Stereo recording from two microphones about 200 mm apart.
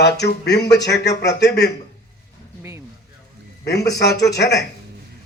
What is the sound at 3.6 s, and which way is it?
Speech, 55° left (ahead or behind).